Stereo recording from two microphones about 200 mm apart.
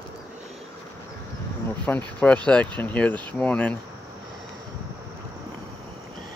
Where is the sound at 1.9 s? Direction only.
10° left (ahead or behind).